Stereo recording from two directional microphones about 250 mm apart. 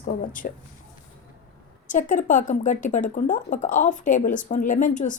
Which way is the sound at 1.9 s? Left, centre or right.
Left.